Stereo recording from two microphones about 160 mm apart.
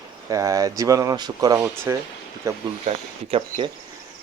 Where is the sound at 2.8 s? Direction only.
40° right (ahead or behind).